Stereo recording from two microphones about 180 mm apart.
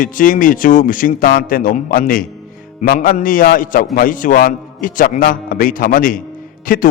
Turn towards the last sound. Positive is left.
turn(degrees=50)  # may be behind; listen again after turning